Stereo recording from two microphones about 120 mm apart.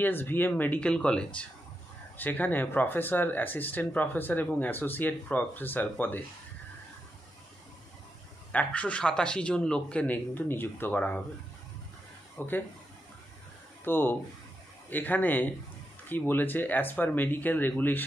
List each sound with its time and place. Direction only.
0.0 s speech: 15° left (ahead or behind)
8.5 s speech: 10° left (ahead or behind)
12.4 s speech: 15° left (ahead or behind)
13.8 s speech: 15° left (ahead or behind)